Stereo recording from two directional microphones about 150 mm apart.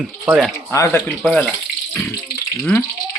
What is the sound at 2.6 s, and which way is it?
Speech, 10° left (ahead or behind).